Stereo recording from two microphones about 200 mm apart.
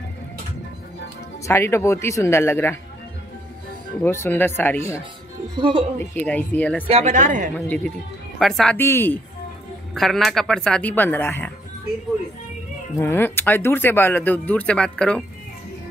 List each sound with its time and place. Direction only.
1.4 s speech: 15° left (ahead or behind)
4.0 s speech: 10° left (ahead or behind)
5.6 s a woman's voice: 25° right (ahead or behind)
5.9 s speech: 10° left (ahead or behind)
6.9 s a woman's voice: 35° right (ahead or behind)
7.5 s speech: 5° left (ahead or behind)
13.0 s speech: 10° left (ahead or behind)